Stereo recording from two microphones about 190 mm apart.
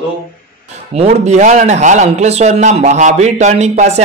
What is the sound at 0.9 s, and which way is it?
A man's voice, 35° right (ahead or behind).